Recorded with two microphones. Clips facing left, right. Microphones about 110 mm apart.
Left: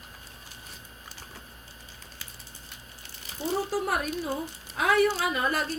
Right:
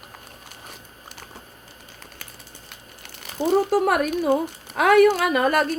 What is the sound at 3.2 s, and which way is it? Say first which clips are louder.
Speech: right 10 dB; 65° right (ahead or behind).